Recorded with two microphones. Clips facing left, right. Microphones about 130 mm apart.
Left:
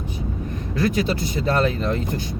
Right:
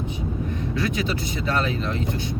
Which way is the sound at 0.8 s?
35° left (ahead or behind).